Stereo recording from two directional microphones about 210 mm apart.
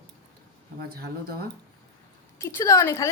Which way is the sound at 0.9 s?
45° right (ahead or behind).